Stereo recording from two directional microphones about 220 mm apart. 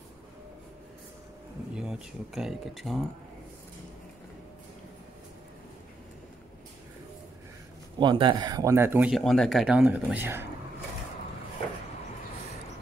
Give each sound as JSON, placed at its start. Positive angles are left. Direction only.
{"t": 1.8, "sound": "speech", "side_deg": -5}
{"t": 8.0, "sound": "speech", "side_deg": -20}